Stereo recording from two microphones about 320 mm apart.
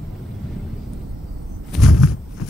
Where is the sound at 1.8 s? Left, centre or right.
Left.